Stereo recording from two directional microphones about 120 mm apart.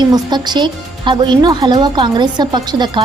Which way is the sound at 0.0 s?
35° right (ahead or behind).